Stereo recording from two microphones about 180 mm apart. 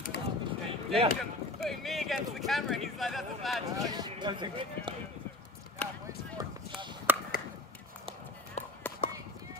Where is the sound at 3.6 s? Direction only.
20° right (ahead or behind).